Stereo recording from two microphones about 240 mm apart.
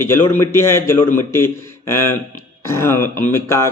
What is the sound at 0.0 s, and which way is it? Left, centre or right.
A man's voice, centre.